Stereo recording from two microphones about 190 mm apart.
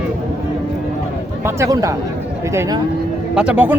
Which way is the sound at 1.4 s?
15° right (ahead or behind).